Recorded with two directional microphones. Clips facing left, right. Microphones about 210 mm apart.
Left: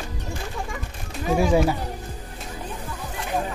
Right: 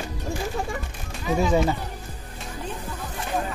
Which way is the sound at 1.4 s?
5° left (ahead or behind).